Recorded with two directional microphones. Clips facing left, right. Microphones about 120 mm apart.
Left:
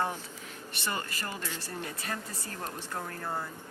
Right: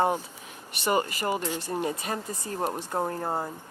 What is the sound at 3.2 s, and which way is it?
Speech, 40° right (ahead or behind).